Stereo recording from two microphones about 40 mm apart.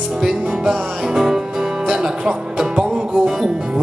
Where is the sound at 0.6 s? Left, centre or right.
Centre.